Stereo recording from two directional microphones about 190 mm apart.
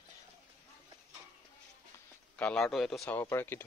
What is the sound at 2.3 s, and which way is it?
Speech, 5° left (ahead or behind).